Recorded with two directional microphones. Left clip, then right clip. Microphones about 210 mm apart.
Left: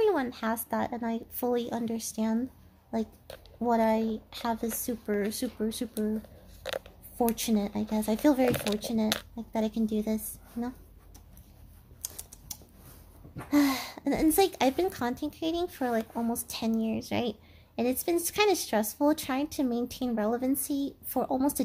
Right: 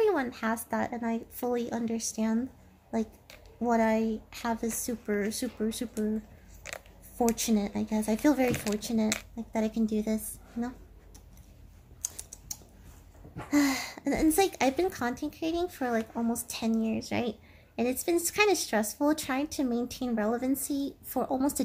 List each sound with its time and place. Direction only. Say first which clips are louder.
0.0 s a woman's voice: even; 20° left (ahead or behind)
7.2 s speech: even; 15° left (ahead or behind)
12.0 s typing: right 3 dB; 20° left (ahead or behind)
13.5 s a woman's voice: left 1 dB; 20° left (ahead or behind)